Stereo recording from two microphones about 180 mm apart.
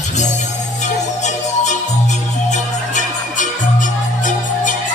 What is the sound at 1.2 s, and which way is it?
Music, 40° left (ahead or behind).